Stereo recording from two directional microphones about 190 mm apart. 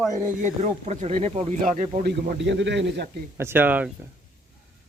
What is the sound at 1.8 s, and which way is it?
Speech, 50° right (ahead or behind).